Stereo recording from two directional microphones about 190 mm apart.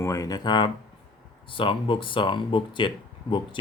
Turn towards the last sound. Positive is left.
turn(degrees=25)  # may be behind; listen again after turning